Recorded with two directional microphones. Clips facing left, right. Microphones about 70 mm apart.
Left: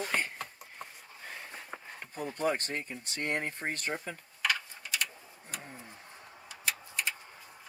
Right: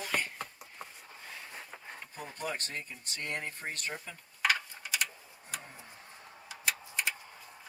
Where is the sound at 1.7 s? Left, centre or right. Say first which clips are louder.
Left 5 dB; left.